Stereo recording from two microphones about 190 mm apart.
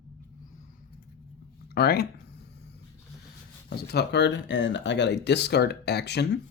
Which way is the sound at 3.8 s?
60° left (ahead or behind).